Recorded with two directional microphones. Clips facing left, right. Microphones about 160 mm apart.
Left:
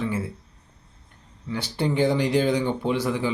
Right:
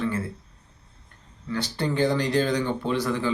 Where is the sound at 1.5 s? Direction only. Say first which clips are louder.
Left 1 dB; 15° left (ahead or behind).